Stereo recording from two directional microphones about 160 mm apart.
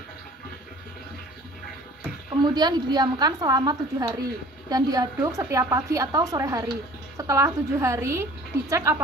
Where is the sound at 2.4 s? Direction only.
25° right (ahead or behind).